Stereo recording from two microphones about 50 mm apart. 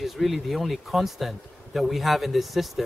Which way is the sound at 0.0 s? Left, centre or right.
Centre.